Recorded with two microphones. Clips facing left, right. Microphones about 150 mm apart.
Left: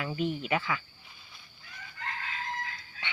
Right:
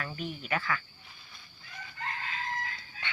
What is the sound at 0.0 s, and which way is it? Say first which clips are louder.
Speech: left 6 dB; 15° left (ahead or behind).